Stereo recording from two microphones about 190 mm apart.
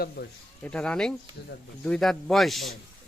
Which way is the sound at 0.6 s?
5° left (ahead or behind).